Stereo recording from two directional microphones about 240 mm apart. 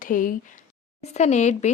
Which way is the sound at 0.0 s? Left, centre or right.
Left.